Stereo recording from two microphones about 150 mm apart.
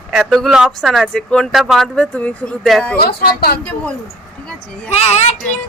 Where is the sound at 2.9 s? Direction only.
90° left.